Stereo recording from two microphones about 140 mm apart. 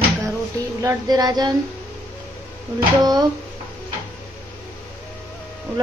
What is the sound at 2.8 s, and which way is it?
Child singing, 30° right (ahead or behind).